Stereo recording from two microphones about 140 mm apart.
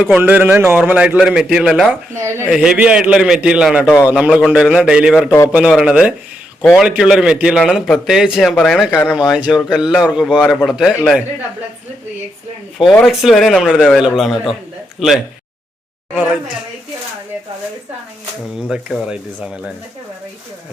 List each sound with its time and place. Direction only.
0.0 s a man's voice: 15° right (ahead or behind)
2.1 s speech: 20° right (ahead or behind)
2.5 s a man's voice: 5° right (ahead or behind)
13.1 s a man's voice: centre (ahead or behind)
18.7 s a man's voice: 5° right (ahead or behind)